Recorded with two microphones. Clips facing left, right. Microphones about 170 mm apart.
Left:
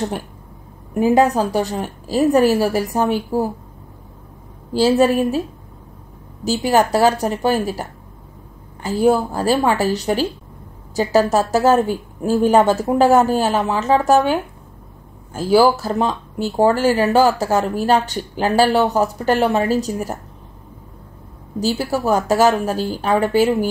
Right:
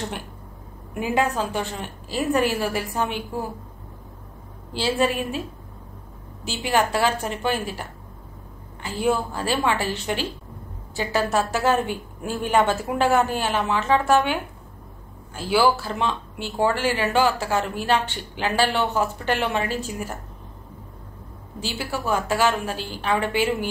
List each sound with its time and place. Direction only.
0.9 s speech: 40° left (ahead or behind)
4.7 s speech: 40° left (ahead or behind)
6.4 s speech: 40° left (ahead or behind)
21.5 s speech: 40° left (ahead or behind)